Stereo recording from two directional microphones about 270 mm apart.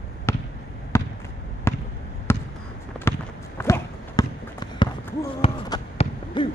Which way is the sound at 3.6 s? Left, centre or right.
Centre.